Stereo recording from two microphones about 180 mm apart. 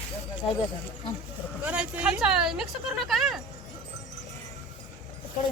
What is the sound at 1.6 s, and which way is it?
Speech, 5° right (ahead or behind).